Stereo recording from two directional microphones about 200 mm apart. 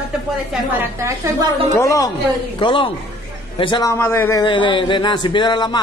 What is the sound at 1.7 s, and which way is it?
A man's voice, 15° left (ahead or behind).